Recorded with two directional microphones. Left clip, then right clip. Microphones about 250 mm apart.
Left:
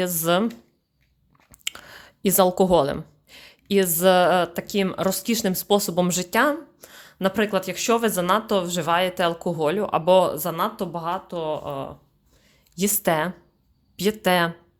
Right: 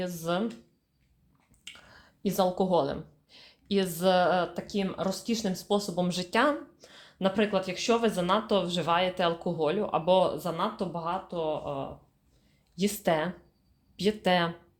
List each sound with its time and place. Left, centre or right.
0.0 s speech: left
1.6 s speech: left